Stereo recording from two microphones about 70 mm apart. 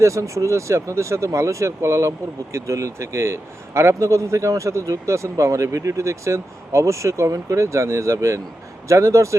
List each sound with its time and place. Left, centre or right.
0.0 s speech: right